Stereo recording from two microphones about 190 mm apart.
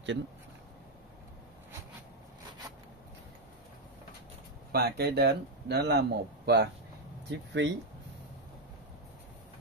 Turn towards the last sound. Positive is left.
turn(degrees=-70)  # may be behind; listen again after turning